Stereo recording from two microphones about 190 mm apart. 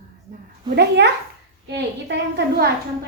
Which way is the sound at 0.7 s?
60° right (ahead or behind).